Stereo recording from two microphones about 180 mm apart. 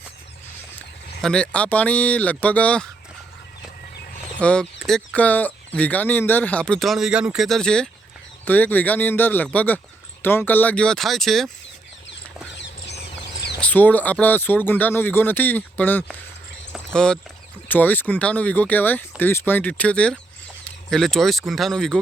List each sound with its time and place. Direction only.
1.2 s speech: 5° left (ahead or behind)
4.4 s speech: 5° left (ahead or behind)
12.5 s rodents: 75° left (ahead or behind)
13.6 s speech: 10° left (ahead or behind)